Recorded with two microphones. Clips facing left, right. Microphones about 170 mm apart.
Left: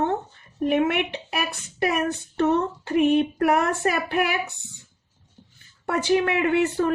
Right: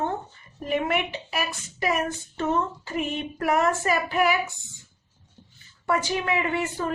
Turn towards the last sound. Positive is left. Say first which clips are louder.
# left 6 dB
turn(degrees=60)  # may be behind; listen again after turning